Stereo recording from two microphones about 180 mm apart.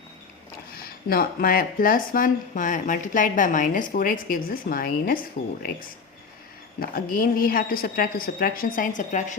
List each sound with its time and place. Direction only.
1.1 s speech: 55° left (ahead or behind)
6.7 s speech: 55° left (ahead or behind)